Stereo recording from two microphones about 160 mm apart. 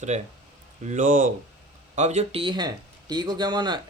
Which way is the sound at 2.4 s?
30° right (ahead or behind).